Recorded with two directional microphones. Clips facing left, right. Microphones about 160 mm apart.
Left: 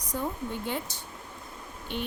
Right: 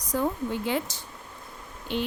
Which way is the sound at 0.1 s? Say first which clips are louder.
Right 5 dB; 90° right.